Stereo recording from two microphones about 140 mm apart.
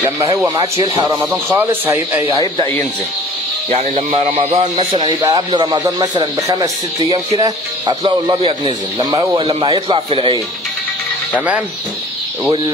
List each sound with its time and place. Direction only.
0.6 s speech: 30° right (ahead or behind)
3.7 s a man's voice: 50° right (ahead or behind)
4.9 s speech: 30° right (ahead or behind)
8.0 s speech: 40° right (ahead or behind)
9.4 s speech: 40° right (ahead or behind)